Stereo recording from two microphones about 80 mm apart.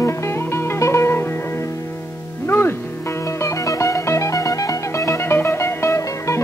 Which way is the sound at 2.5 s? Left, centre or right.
Left.